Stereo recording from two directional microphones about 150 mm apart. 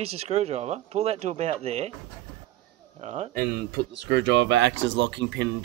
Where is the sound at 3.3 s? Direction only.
85° right.